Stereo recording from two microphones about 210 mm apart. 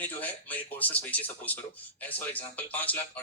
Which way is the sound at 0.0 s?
10° left (ahead or behind).